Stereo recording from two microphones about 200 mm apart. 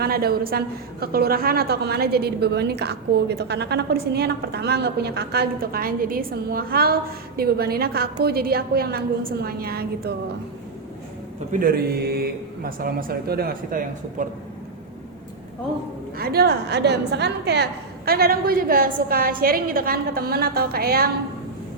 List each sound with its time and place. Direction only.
0.0 s a woman's voice: 50° right (ahead or behind)
11.6 s a woman's voice: 50° right (ahead or behind)
16.1 s a woman's voice: 50° right (ahead or behind)